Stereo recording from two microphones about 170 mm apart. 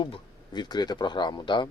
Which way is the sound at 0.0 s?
25° left (ahead or behind).